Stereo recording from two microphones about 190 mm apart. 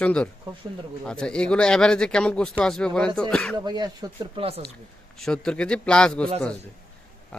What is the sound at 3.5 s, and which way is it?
Speech, 20° right (ahead or behind).